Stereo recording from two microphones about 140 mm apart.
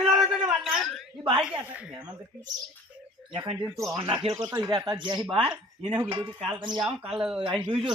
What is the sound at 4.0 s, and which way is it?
Speech, 35° right (ahead or behind).